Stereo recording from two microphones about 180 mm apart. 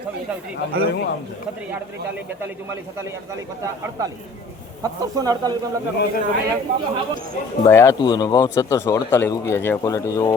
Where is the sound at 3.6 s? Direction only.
20° right (ahead or behind).